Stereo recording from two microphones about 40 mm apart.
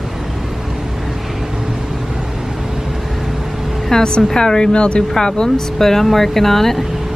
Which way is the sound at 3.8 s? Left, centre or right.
Centre.